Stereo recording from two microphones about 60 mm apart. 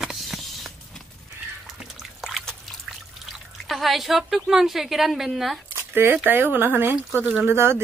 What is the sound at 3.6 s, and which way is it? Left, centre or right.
A woman's voice, centre.